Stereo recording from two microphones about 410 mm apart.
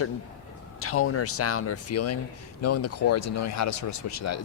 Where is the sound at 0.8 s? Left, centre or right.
Left.